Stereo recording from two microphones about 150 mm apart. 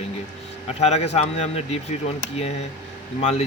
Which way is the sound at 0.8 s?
45° left (ahead or behind).